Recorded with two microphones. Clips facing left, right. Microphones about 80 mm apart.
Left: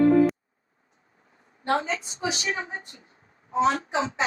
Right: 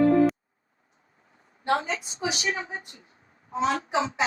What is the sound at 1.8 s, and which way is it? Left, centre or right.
A woman's voice, left.